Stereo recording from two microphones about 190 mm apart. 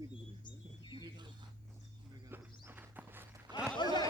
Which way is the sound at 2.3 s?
10° right (ahead or behind).